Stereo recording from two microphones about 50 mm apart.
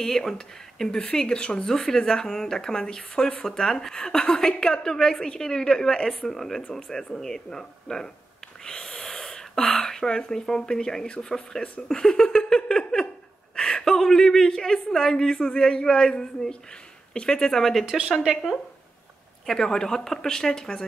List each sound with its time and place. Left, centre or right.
0.0 s a woman's voice: centre
11.9 s laughter: centre
13.6 s a woman's voice: centre
17.8 s speech: centre
19.4 s a woman's voice: centre